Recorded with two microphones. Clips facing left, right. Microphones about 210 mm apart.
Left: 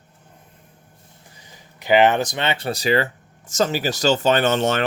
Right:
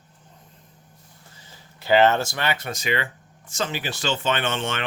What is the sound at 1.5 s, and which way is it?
Speech, 15° left (ahead or behind).